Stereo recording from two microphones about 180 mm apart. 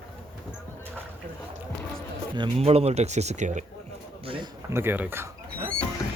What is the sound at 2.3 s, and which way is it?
Speech, 30° right (ahead or behind).